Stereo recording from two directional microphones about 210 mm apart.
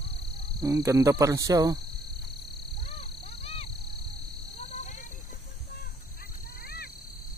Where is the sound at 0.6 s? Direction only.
15° right (ahead or behind).